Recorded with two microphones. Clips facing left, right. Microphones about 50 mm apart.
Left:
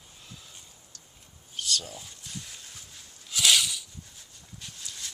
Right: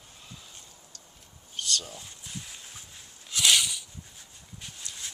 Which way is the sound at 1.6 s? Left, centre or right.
Centre.